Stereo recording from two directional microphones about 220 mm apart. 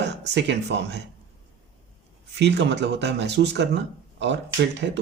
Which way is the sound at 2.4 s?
50° right (ahead or behind).